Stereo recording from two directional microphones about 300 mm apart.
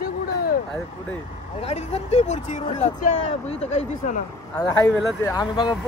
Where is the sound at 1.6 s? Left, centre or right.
Left.